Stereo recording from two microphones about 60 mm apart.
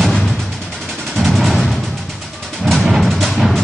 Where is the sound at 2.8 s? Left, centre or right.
Centre.